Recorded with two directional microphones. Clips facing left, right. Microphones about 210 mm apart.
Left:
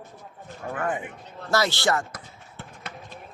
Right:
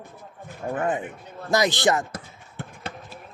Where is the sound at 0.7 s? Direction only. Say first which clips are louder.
Right 3 dB; 20° right (ahead or behind).